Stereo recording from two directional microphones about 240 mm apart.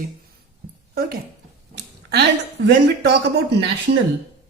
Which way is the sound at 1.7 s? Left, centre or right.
Right.